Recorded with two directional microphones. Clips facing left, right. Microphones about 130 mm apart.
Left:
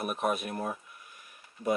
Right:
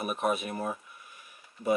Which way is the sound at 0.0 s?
Centre (ahead or behind).